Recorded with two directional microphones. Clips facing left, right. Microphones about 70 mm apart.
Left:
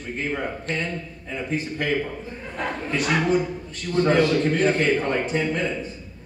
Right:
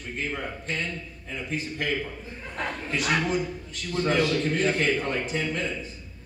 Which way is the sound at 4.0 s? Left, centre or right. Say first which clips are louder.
Left 5 dB; left.